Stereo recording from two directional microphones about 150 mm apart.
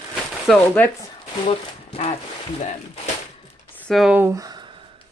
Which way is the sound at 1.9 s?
40° left (ahead or behind).